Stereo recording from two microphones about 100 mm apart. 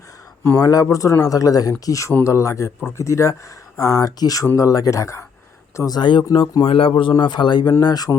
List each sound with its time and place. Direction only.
0.5 s speech: 35° left (ahead or behind); by 7.1 s 60° left (ahead or behind)
7.2 s speech: 50° left (ahead or behind)